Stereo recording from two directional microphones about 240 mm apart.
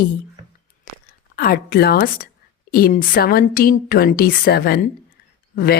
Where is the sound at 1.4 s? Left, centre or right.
Left.